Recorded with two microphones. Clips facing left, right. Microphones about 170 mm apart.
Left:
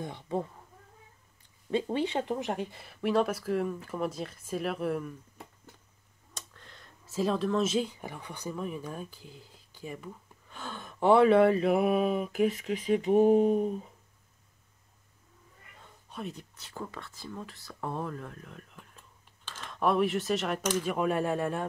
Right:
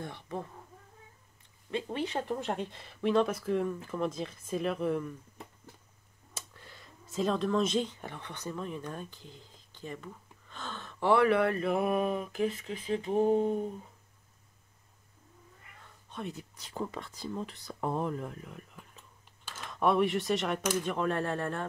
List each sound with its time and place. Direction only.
0.0 s speech: 20° left (ahead or behind)
1.7 s speech: 30° left (ahead or behind)
2.1 s speech: 15° left (ahead or behind)
6.3 s a sound: 10° right (ahead or behind)
7.1 s speech: 5° left (ahead or behind); by 11.5 s 20° left (ahead or behind)
11.5 s a sound: 10° left (ahead or behind)
16.1 s speech: centre (ahead or behind)
16.5 s speech: 15° right (ahead or behind); by 20.6 s centre (ahead or behind)
20.8 s a sound: 10° left (ahead or behind)